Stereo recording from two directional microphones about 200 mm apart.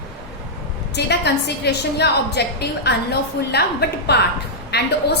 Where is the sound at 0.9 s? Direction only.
55° left (ahead or behind).